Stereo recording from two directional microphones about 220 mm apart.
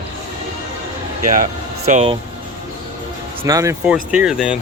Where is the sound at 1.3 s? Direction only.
35° right (ahead or behind).